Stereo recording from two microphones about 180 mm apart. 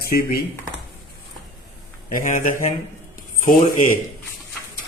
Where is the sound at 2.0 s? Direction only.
50° left (ahead or behind).